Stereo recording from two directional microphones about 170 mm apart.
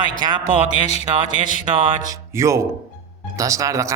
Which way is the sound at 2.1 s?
15° right (ahead or behind).